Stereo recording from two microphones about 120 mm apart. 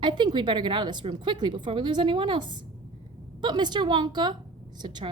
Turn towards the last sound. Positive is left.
turn(degrees=-40)  # may be behind; listen again after turning